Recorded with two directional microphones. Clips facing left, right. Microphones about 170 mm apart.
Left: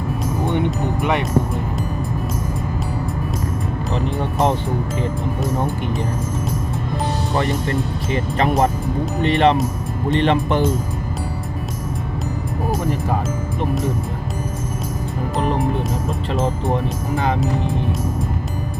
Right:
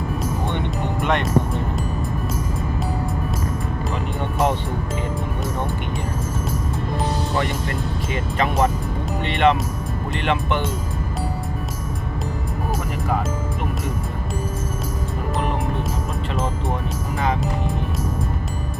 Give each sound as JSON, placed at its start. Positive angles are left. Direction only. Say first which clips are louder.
{"t": 9.2, "sound": "speech", "louder": "left 3 dB", "side_deg": 40}